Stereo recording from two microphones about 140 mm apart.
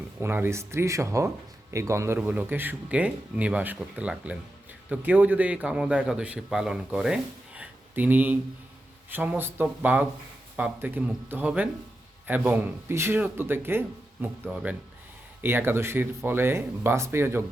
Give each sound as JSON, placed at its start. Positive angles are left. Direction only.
{"t": 0.2, "sound": "a man's voice", "side_deg": -15}